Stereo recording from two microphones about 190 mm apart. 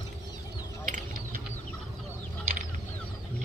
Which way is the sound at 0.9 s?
45° right (ahead or behind).